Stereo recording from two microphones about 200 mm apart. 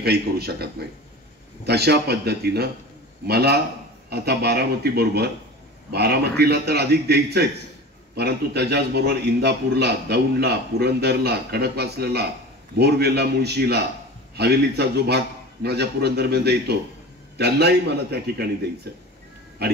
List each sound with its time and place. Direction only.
0.0 s a man's voice: 55° right (ahead or behind)